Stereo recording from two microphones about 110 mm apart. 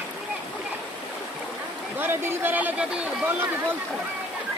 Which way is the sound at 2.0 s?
20° right (ahead or behind).